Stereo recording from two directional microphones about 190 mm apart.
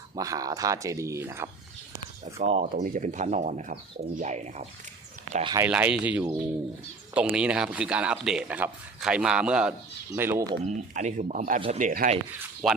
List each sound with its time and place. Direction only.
0.2 s speech: 20° right (ahead or behind)
2.4 s speech: 35° right (ahead or behind)
5.4 s speech: 25° right (ahead or behind)
5.6 s speech: 5° right (ahead or behind)
10.6 s speech: 40° right (ahead or behind)
12.6 s speech: centre (ahead or behind)